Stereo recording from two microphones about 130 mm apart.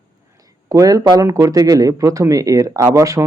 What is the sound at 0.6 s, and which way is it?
Speech, 25° right (ahead or behind).